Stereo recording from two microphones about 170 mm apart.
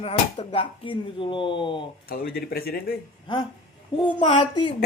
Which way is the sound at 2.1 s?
65° left (ahead or behind).